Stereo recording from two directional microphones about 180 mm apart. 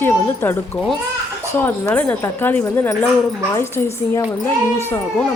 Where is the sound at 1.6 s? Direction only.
10° left (ahead or behind).